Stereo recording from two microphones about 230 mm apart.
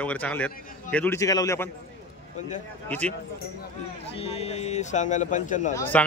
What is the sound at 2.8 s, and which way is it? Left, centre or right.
Speech, centre.